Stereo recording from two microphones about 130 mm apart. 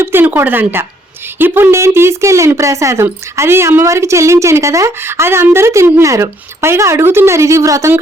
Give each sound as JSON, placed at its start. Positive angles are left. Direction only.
{"t": 0.0, "sound": "speech", "side_deg": -15}